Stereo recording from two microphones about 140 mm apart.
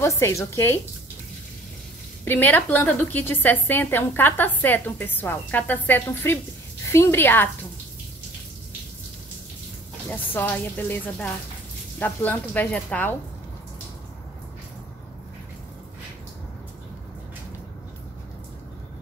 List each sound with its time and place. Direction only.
0.0 s a woman's voice: 20° left (ahead or behind)
2.2 s a woman's voice: 15° left (ahead or behind)
10.0 s a woman's voice: 10° left (ahead or behind)